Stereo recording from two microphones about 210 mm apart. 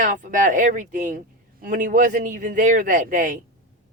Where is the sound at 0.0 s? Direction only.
35° right (ahead or behind).